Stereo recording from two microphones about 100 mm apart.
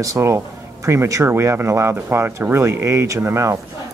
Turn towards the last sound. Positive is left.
turn(degrees=-30)  # may be behind; listen again after turning